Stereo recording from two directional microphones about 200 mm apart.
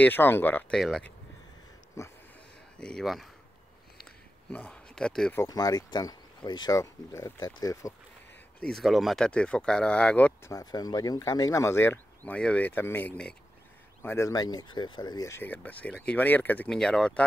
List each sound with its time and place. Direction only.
0.0 s speech: 10° left (ahead or behind)
2.0 s speech: 15° left (ahead or behind)
2.8 s speech: centre (ahead or behind)
4.5 s speech: 5° left (ahead or behind)
5.4 s speech: 20° left (ahead or behind)
8.5 s speech: centre (ahead or behind)